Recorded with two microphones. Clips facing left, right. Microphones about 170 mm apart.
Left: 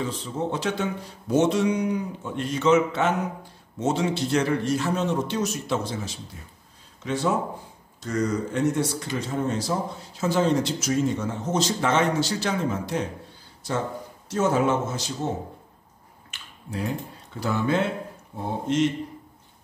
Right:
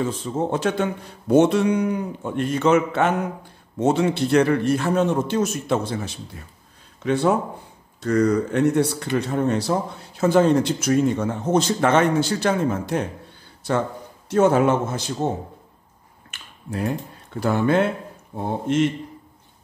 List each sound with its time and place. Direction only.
0.0 s speech: 50° right (ahead or behind)
16.3 s finger snapping: 50° right (ahead or behind)
17.4 s speech: 55° right (ahead or behind)